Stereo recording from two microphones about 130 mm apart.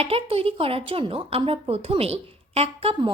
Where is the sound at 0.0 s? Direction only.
45° right (ahead or behind).